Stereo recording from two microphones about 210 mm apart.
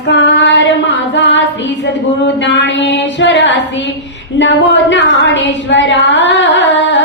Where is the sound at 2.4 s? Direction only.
60° left (ahead or behind).